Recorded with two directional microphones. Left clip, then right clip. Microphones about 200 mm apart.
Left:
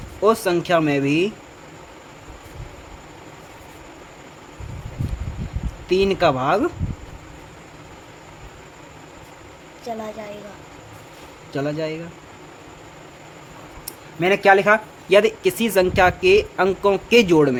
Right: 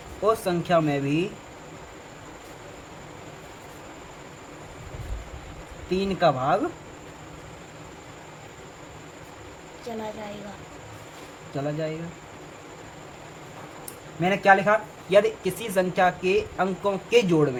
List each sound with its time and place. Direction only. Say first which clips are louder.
0.2 s speech: left 6 dB; 50° left (ahead or behind)
5.9 s speech: left 5 dB; 55° left (ahead or behind)
11.5 s speech: left 5 dB; 55° left (ahead or behind)
14.2 s speech: left 4 dB; 55° left (ahead or behind)